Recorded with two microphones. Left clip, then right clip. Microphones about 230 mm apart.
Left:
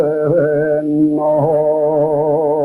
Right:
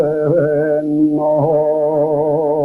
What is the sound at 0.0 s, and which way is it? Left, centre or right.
Music, left.